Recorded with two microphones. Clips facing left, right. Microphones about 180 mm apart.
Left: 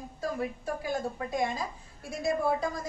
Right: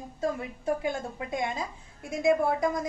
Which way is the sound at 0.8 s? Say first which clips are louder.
Even; 20° right (ahead or behind).